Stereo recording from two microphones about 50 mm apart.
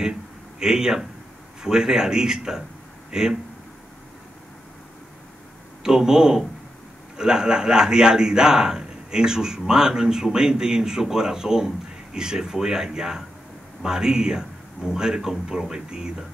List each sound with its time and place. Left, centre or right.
0.6 s a man's voice: centre
5.9 s a man's voice: centre